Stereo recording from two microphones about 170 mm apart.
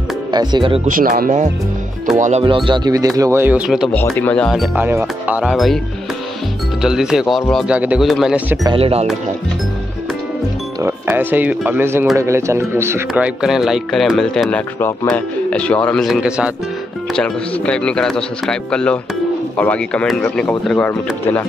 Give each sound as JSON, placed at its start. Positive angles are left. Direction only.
{"t": 0.3, "sound": "speech", "side_deg": -25}
{"t": 0.8, "sound": "speech", "side_deg": -55}
{"t": 2.4, "sound": "speech", "side_deg": -30}
{"t": 3.9, "sound": "speech", "side_deg": 10}
{"t": 4.7, "sound": "speech", "side_deg": -10}
{"t": 6.8, "sound": "speech", "side_deg": -5}
{"t": 8.7, "sound": "speech", "side_deg": -35}
{"t": 10.8, "sound": "speech", "side_deg": -10}
{"t": 13.1, "sound": "speech", "side_deg": -5}
{"t": 17.1, "sound": "speech", "side_deg": 5}